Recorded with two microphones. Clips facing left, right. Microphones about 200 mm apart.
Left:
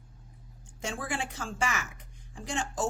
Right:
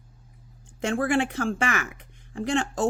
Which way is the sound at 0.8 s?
60° right (ahead or behind).